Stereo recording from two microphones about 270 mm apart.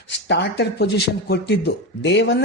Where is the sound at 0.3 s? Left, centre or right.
Left.